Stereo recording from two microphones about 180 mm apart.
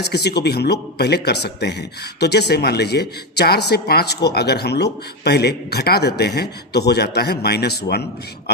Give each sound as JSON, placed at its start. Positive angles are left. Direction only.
{"t": 0.0, "sound": "a man's voice", "side_deg": 65}